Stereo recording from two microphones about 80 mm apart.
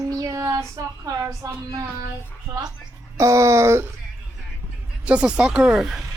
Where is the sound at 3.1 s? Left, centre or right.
Right.